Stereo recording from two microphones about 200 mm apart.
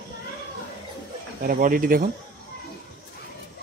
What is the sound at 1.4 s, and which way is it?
Speech, 45° right (ahead or behind).